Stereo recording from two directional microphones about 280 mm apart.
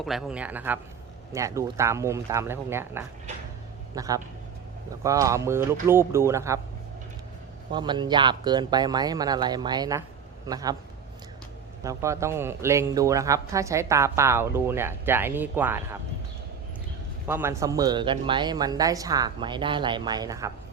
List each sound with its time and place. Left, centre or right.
0.0 s speech: centre
7.7 s speech: centre
11.8 s speech: centre
17.2 s speech: centre